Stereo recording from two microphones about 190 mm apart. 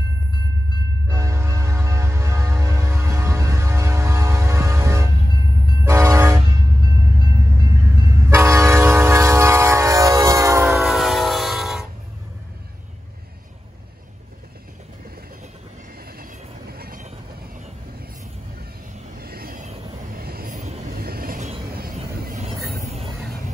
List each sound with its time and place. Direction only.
1.0 s train: 15° right (ahead or behind)
7.6 s train: 15° right (ahead or behind)
10.7 s train: centre (ahead or behind)
16.1 s train: 55° right (ahead or behind)
19.1 s vehicle: 50° right (ahead or behind)
21.0 s vehicle: 50° right (ahead or behind)